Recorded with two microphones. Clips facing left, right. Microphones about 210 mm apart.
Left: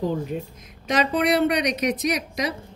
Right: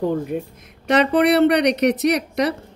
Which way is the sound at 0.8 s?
65° right (ahead or behind).